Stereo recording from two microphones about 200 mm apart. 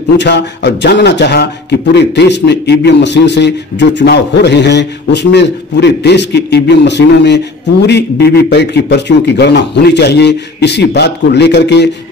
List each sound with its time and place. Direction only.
0.2 s a man's voice: 60° left (ahead or behind)